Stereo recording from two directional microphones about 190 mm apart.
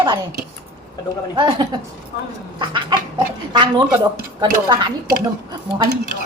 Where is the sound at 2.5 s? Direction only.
25° right (ahead or behind).